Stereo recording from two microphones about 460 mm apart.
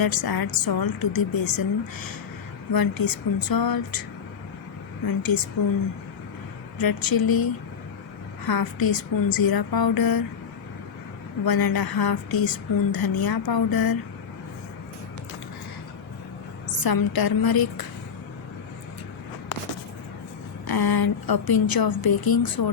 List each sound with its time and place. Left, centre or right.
0.0 s speech: left
5.0 s speech: left
6.7 s speech: left
8.4 s speech: left
11.4 s speech: left
16.8 s speech: left
20.7 s speech: left